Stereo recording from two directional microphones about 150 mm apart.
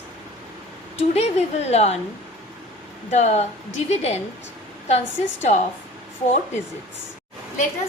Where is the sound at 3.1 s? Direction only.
50° left (ahead or behind).